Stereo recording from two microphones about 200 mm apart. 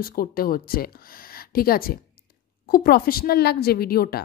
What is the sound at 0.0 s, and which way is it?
A woman's voice, 45° left (ahead or behind).